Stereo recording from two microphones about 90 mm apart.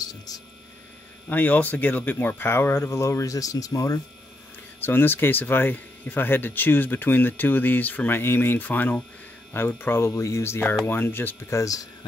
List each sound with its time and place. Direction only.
0.0 s speech: 45° left (ahead or behind)
1.3 s speech: 20° left (ahead or behind); by 4.0 s 35° left (ahead or behind)
4.8 s speech: 25° left (ahead or behind); by 11.9 s 40° left (ahead or behind)